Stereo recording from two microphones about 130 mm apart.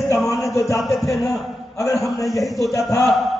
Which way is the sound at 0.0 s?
Centre (ahead or behind).